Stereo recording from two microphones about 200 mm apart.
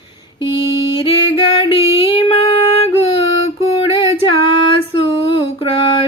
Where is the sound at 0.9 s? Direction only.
25° left (ahead or behind).